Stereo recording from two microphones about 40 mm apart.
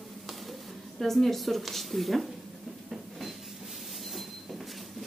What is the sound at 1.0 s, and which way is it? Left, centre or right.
Speech, centre.